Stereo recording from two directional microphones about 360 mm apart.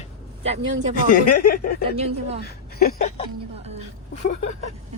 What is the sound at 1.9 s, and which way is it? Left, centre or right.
Speech, centre.